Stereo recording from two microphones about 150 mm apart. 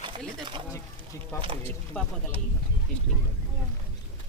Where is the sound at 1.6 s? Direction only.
10° left (ahead or behind).